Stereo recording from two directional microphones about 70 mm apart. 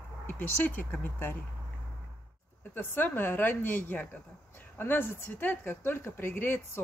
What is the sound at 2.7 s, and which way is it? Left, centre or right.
A woman's voice, left.